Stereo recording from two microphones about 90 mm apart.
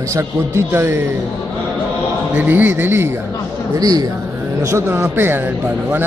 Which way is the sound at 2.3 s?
20° right (ahead or behind).